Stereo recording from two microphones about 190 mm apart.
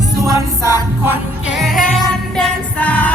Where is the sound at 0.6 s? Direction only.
15° right (ahead or behind).